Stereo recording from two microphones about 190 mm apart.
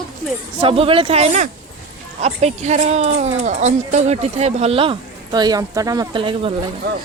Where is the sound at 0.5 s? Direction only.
30° right (ahead or behind).